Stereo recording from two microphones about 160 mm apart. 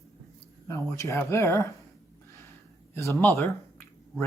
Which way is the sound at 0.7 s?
20° left (ahead or behind).